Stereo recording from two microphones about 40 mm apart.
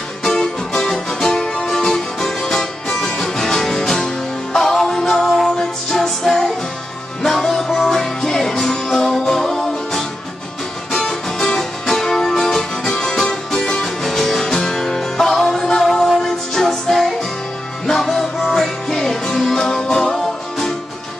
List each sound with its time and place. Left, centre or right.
0.2 s music: centre
17.8 s music: centre